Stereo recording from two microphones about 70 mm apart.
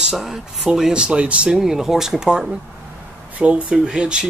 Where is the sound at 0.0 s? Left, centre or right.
Centre.